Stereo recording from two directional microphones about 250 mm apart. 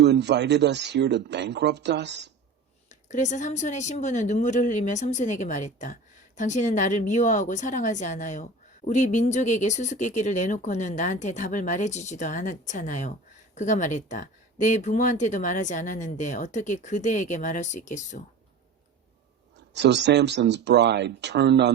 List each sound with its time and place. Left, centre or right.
0.0 s speech: right
2.9 s a woman's voice: left
19.7 s speech: right